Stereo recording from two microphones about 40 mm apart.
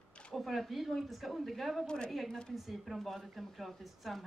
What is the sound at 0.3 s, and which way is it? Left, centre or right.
Speech, centre.